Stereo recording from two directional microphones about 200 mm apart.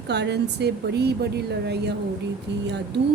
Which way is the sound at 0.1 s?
55° right (ahead or behind).